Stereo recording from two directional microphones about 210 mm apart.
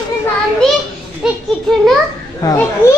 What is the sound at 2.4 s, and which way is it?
Speech, 15° left (ahead or behind).